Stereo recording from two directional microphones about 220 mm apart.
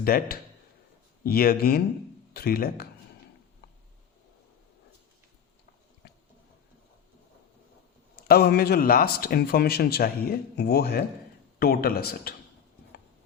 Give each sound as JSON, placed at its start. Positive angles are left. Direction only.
{"t": 0.0, "sound": "a man's voice", "side_deg": 40}
{"t": 8.1, "sound": "a man's voice", "side_deg": 45}